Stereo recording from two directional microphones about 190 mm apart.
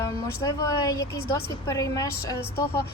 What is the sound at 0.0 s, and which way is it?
A woman's voice, 20° left (ahead or behind).